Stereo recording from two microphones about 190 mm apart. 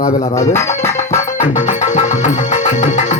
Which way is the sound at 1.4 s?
40° left (ahead or behind).